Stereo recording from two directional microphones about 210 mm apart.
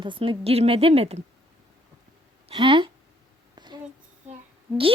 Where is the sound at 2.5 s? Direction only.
25° right (ahead or behind).